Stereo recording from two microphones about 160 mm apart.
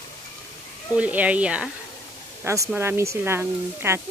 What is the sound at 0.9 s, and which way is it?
Speech, 10° right (ahead or behind).